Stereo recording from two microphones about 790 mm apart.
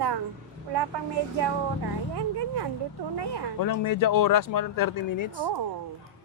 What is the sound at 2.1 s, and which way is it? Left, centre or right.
Speech, right.